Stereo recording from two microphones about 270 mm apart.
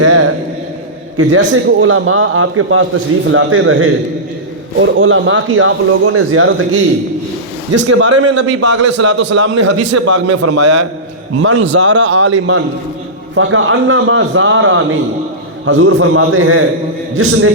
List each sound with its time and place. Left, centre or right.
0.0 s a sound: right
1.1 s a man's voice: right
8.4 s a man's voice: right
9.6 s a man's voice: right
11.9 s a man's voice: right